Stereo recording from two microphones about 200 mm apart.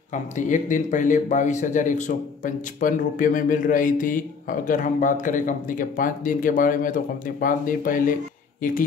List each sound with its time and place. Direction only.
0.1 s a man's voice: 40° left (ahead or behind)